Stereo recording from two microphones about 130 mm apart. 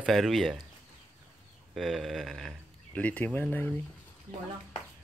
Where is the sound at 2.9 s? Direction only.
10° left (ahead or behind).